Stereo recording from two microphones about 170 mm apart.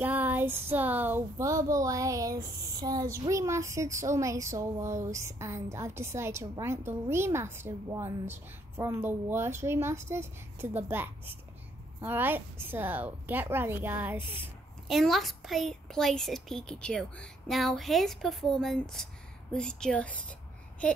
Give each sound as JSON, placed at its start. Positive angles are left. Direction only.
{"t": 0.0, "sound": "speech", "side_deg": -10}
{"t": 14.9, "sound": "a child's voice", "side_deg": 0}